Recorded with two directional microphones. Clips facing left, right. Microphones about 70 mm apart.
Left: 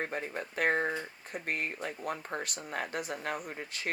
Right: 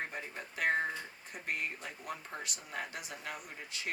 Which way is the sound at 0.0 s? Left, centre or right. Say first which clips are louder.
Left 6 dB; left.